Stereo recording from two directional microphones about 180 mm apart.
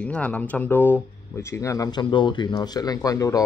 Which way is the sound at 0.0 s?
10° left (ahead or behind).